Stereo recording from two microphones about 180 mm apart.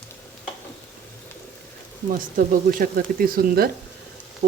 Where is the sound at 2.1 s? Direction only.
50° right (ahead or behind).